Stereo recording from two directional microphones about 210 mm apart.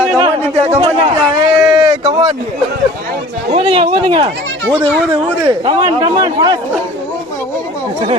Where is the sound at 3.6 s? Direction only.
25° right (ahead or behind).